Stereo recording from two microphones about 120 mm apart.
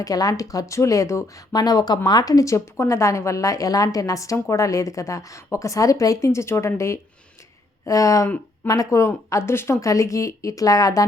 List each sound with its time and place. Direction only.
0.0 s a woman's voice: 30° left (ahead or behind)